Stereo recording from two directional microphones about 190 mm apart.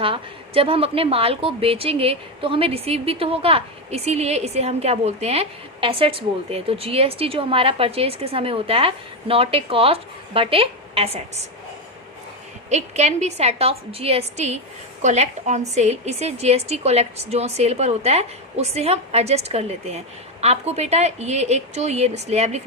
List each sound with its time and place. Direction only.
0.0 s a woman's voice: 30° right (ahead or behind)
12.7 s a woman's voice: 35° right (ahead or behind)